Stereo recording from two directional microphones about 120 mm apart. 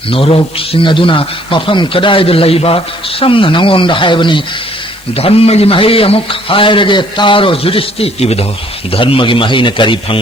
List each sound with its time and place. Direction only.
0.1 s a man's voice: 50° left (ahead or behind)
5.1 s a man's voice: 55° left (ahead or behind)